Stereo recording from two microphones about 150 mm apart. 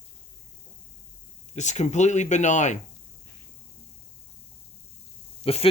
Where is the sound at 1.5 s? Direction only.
50° left (ahead or behind).